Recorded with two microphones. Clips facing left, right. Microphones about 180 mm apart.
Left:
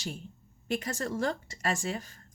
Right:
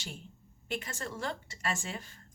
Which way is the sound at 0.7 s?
40° left (ahead or behind).